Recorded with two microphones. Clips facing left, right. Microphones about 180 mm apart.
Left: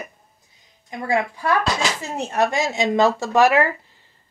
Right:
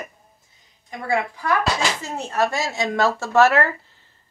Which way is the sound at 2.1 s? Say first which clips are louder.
Left 3 dB; 20° left (ahead or behind).